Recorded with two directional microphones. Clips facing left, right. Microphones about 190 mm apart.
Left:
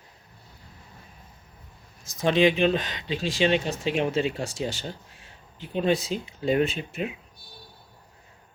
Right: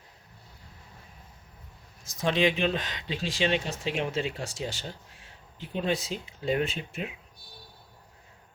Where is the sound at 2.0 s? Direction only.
5° left (ahead or behind).